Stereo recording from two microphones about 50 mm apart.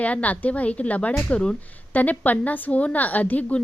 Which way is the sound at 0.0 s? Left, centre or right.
Left.